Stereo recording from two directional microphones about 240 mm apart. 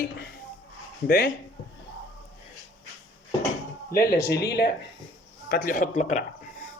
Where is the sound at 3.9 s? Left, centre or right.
Left.